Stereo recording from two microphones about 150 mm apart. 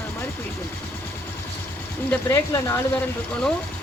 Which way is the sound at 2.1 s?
20° left (ahead or behind).